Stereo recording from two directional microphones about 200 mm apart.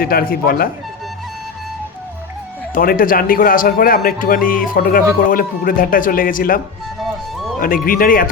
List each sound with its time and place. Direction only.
0.0 s a man's voice: 50° left (ahead or behind)
2.7 s a man's voice: 45° left (ahead or behind)
7.6 s a man's voice: 45° left (ahead or behind)